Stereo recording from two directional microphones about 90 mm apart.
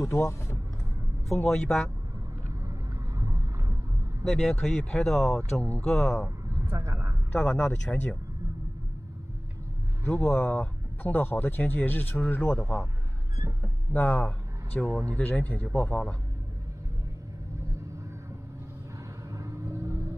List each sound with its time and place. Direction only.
0.0 s speech: 30° left (ahead or behind)
1.3 s speech: 5° left (ahead or behind)
3.2 s boat: 35° right (ahead or behind)
4.3 s speech: 5° left (ahead or behind)
6.2 s a sound: 30° right (ahead or behind)
7.3 s speech: 10° left (ahead or behind)
10.0 s speech: 25° left (ahead or behind)
13.9 s speech: 20° left (ahead or behind)
17.6 s vehicle: 35° right (ahead or behind)
19.3 s music: 35° right (ahead or behind)